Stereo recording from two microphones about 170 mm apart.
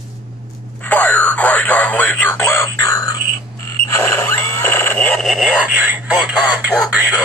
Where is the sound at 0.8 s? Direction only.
10° left (ahead or behind); by 6.5 s 10° right (ahead or behind).